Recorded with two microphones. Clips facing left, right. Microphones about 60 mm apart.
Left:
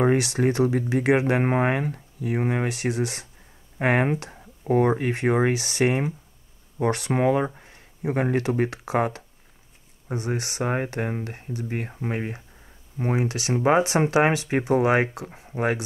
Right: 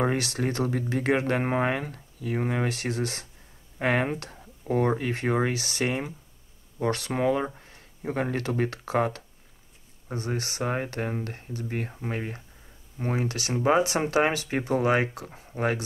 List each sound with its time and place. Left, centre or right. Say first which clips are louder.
0.0 s speech: left 6 dB; left
3.7 s speech: left 3 dB; left
4.1 s speech: left 5 dB; centre; by 7.4 s left
7.4 s speech: left 3 dB; centre